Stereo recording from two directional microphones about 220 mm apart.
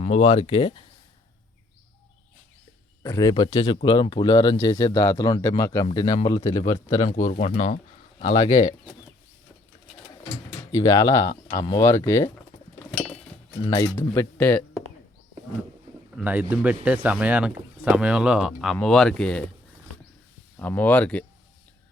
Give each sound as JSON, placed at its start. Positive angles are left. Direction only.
{"t": 0.0, "sound": "speech", "side_deg": 30}
{"t": 3.0, "sound": "speech", "side_deg": 15}
{"t": 7.1, "sound": "speech", "side_deg": 35}
{"t": 10.7, "sound": "speech", "side_deg": 15}
{"t": 13.6, "sound": "speech", "side_deg": 15}
{"t": 16.1, "sound": "a man's voice", "side_deg": -5}
{"t": 20.6, "sound": "speech", "side_deg": 10}